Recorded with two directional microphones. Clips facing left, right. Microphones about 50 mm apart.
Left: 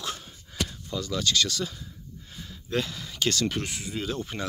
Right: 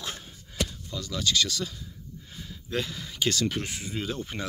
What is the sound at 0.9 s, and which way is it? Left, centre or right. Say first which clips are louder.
Speech: left 1 dB; centre.